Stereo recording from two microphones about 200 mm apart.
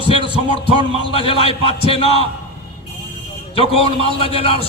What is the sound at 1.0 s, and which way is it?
A man's voice, 25° left (ahead or behind).